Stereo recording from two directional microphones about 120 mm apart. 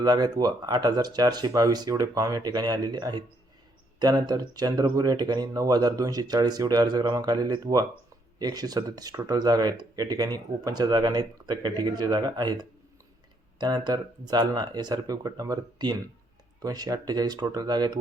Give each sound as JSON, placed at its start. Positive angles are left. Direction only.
{"t": 0.0, "sound": "speech", "side_deg": -35}